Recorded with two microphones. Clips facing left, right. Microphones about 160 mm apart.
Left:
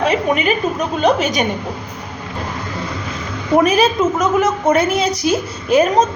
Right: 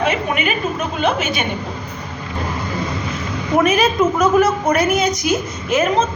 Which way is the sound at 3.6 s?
35° left (ahead or behind).